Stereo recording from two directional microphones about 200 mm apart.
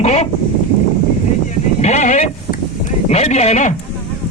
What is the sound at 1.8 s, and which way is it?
Sheep, 35° left (ahead or behind).